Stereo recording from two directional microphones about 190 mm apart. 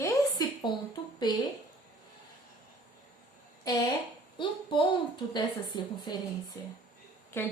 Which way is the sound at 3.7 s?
20° left (ahead or behind).